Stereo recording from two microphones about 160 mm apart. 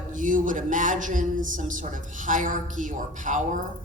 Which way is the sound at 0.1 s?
55° right (ahead or behind).